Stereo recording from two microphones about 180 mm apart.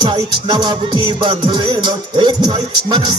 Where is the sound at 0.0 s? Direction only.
25° right (ahead or behind).